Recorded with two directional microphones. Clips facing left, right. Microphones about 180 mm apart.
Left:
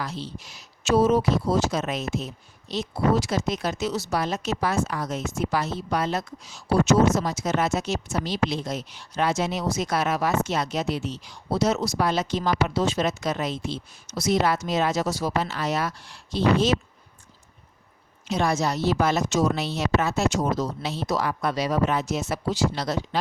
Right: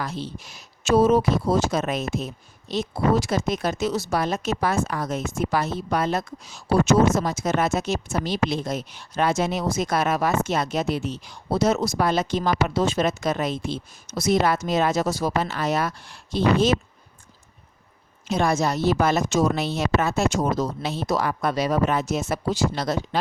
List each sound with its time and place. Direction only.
0.0 s speech: 50° right (ahead or behind)
18.3 s speech: 50° right (ahead or behind)